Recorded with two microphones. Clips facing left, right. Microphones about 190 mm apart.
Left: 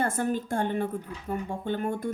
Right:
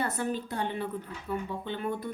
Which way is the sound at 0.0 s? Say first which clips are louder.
Left 4 dB; 50° left (ahead or behind).